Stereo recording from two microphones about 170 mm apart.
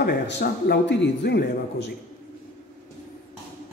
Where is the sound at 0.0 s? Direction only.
80° left.